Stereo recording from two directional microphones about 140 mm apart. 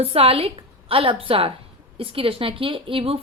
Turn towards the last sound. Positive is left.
turn(degrees=-40)  # may be behind; listen again after turning